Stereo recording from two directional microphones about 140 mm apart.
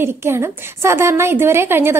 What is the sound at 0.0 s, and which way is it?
A woman's voice, 15° right (ahead or behind).